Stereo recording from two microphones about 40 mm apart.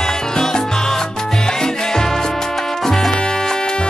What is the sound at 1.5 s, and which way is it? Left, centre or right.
Music, centre.